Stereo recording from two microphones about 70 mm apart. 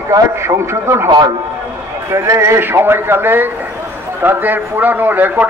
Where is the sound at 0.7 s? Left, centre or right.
Right.